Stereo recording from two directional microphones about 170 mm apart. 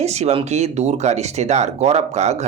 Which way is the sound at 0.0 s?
40° right (ahead or behind).